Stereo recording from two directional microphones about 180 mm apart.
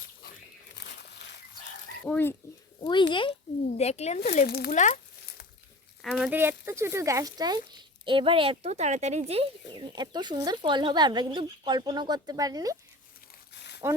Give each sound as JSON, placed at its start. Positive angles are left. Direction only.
{"t": 2.0, "sound": "speech", "side_deg": 10}
{"t": 3.1, "sound": "a child's voice", "side_deg": 30}
{"t": 4.4, "sound": "speech", "side_deg": 60}
{"t": 4.7, "sound": "speech", "side_deg": 40}
{"t": 6.0, "sound": "speech", "side_deg": 0}
{"t": 9.9, "sound": "speech", "side_deg": -25}
{"t": 13.5, "sound": "crumpling", "side_deg": 70}